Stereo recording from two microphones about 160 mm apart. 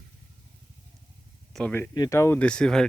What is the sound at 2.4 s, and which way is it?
Speech, 5° left (ahead or behind).